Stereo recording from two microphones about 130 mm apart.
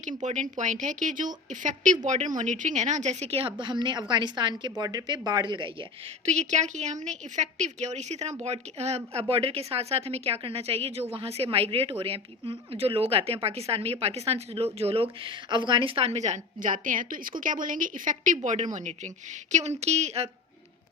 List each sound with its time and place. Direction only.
0.2 s a woman's voice: 70° right (ahead or behind); by 5.7 s 35° right (ahead or behind)
6.2 s a woman's voice: 60° right (ahead or behind)